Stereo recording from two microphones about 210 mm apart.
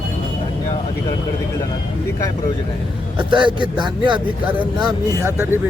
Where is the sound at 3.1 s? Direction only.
20° right (ahead or behind).